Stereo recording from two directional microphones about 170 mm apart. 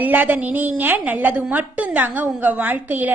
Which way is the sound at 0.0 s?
10° right (ahead or behind).